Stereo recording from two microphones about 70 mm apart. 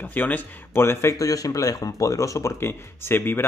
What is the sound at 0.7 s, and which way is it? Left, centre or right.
Speech, left.